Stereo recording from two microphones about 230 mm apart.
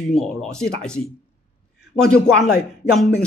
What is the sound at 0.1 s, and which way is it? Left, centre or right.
Speech, centre.